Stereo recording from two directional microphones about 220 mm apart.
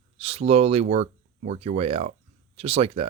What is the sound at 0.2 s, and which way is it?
Speech, 25° right (ahead or behind).